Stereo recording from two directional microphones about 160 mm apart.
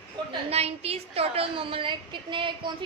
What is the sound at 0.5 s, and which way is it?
A woman's voice, 40° right (ahead or behind).